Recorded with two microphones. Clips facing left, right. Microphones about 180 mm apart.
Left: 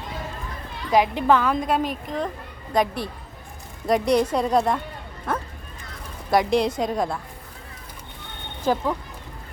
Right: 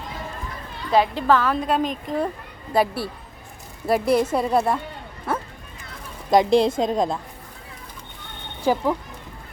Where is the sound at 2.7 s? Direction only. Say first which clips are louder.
Right 1 dB; 5° right (ahead or behind).